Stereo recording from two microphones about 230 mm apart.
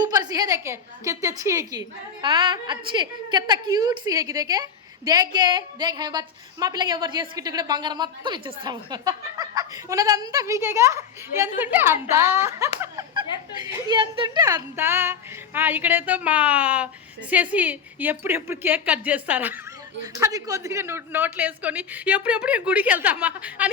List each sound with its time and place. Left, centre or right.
0.0 s a woman's voice: centre